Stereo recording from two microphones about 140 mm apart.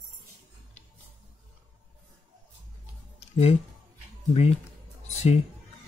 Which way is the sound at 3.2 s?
50° left (ahead or behind).